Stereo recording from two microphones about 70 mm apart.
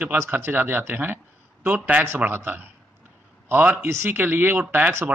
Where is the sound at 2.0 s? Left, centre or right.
Right.